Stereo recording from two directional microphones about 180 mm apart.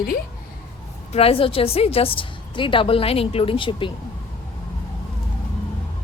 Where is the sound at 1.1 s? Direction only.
30° left (ahead or behind).